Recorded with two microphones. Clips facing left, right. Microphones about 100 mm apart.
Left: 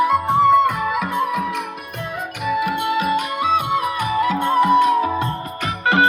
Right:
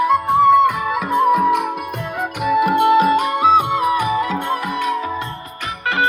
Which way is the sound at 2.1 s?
60° right (ahead or behind).